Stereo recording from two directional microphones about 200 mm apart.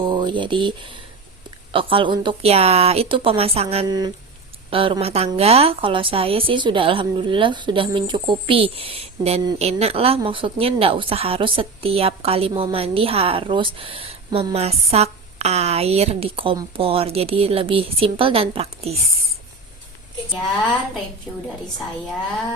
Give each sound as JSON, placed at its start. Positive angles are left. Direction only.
{"t": 0.1, "sound": "a woman's voice", "side_deg": -25}
{"t": 3.8, "sound": "a woman's voice", "side_deg": -20}